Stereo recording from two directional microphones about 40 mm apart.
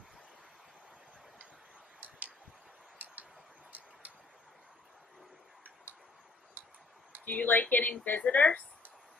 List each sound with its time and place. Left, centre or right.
2.0 s tick-tock: right
6.6 s tick-tock: right
7.2 s speech: left